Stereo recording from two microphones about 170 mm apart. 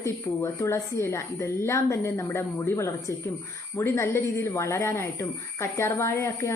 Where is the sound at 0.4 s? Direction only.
15° left (ahead or behind).